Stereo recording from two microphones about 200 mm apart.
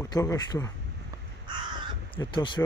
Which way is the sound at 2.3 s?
25° left (ahead or behind).